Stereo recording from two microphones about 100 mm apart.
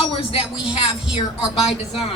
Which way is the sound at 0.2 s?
65° left (ahead or behind).